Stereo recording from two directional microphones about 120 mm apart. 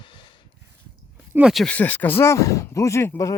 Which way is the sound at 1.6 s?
15° left (ahead or behind).